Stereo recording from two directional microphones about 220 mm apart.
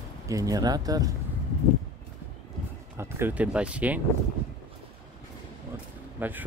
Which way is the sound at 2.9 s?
10° right (ahead or behind).